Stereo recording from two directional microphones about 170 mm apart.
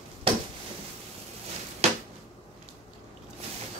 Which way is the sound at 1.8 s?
35° right (ahead or behind).